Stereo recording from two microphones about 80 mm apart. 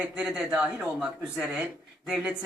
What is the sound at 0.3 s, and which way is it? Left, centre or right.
Speech, centre.